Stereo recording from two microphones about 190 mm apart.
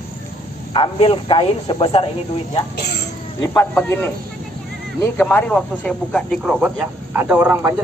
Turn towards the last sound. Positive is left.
turn(degrees=-10)  # may be behind; listen again after turning